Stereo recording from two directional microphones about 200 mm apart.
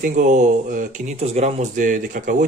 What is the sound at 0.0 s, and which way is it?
Speech, 40° right (ahead or behind).